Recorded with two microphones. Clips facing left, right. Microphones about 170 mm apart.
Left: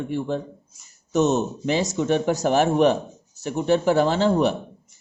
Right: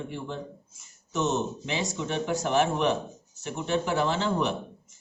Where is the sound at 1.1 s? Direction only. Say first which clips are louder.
Left 7 dB; 40° left (ahead or behind).